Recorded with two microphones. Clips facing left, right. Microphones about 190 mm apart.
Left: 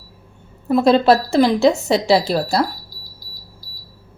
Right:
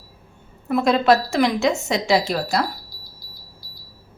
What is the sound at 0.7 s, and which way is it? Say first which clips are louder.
Speech: left 4 dB; 30° left (ahead or behind).